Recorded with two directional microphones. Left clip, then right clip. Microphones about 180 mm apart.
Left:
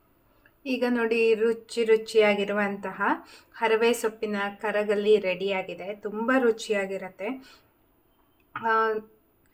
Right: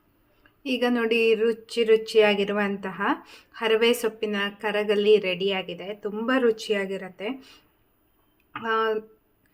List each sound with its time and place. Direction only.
0.6 s a woman's voice: 20° right (ahead or behind)
8.5 s a woman's voice: 15° right (ahead or behind)